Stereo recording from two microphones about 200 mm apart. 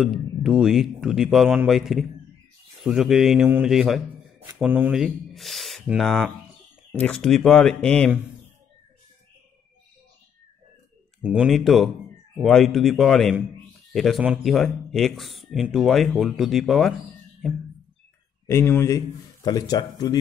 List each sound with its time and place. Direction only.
0.0 s speech: 5° right (ahead or behind)
11.2 s speech: 5° right (ahead or behind)
18.5 s speech: 10° left (ahead or behind)